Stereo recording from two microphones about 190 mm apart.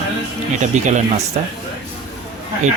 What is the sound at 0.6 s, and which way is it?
Speech, 40° right (ahead or behind).